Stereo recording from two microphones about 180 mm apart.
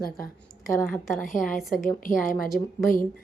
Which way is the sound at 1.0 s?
Centre (ahead or behind).